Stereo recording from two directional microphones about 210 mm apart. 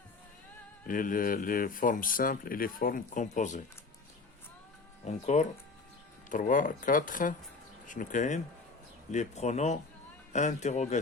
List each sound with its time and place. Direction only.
0.9 s speech: 40° left (ahead or behind)
5.0 s speech: 35° left (ahead or behind)